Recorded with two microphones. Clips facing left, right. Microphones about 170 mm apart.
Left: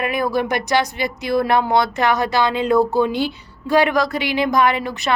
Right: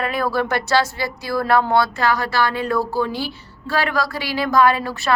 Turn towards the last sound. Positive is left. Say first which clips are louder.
# right 1 dB
turn(degrees=20)  # may be behind; listen again after turning